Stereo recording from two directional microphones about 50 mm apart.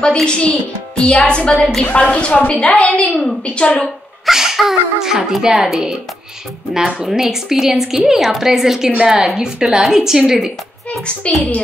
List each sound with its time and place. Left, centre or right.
0.0 s a woman's voice: centre
3.1 s a woman's voice: centre
3.4 s a woman's voice: left
4.3 s a woman's voice: centre
10.9 s a woman's voice: left